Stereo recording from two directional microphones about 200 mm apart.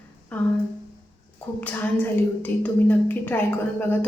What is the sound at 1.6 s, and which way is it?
A woman's voice, 10° left (ahead or behind).